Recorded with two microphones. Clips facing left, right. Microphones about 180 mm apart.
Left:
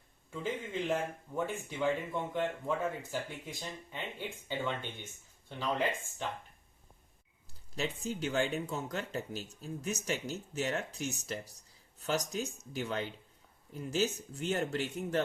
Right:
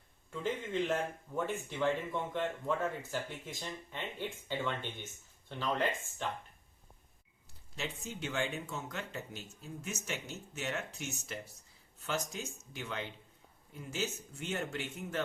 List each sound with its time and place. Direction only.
0.3 s speech: 10° left (ahead or behind)
7.8 s speech: 35° left (ahead or behind)